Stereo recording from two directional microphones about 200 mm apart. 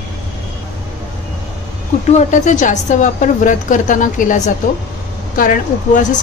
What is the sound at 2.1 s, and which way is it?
A woman's voice, 40° left (ahead or behind).